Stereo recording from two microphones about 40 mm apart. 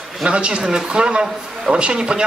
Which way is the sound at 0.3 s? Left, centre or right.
Right.